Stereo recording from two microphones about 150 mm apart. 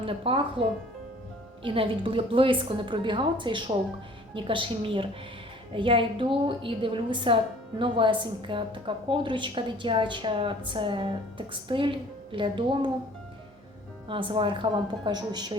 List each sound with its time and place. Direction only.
0.0 s a woman's voice: 35° right (ahead or behind)
1.6 s a woman's voice: 35° right (ahead or behind)
14.1 s a woman's voice: 35° right (ahead or behind)